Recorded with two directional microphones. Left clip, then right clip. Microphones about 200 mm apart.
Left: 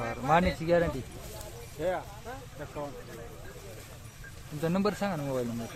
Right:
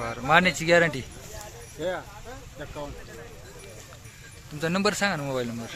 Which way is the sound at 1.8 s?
60° right (ahead or behind).